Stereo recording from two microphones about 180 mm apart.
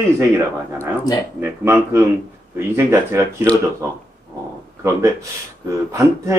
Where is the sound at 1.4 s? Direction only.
15° right (ahead or behind).